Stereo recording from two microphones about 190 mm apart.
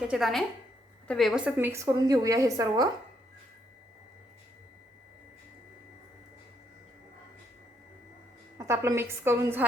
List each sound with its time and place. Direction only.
0.1 s a woman's voice: centre (ahead or behind); by 2.9 s 20° right (ahead or behind)
8.5 s a woman's voice: 15° right (ahead or behind)